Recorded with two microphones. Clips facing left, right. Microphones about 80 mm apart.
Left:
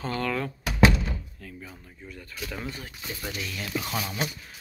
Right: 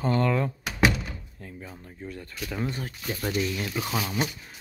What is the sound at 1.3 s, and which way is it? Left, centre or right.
Door, right.